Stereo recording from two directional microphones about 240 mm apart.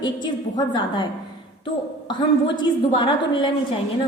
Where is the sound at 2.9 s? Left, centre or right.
Centre.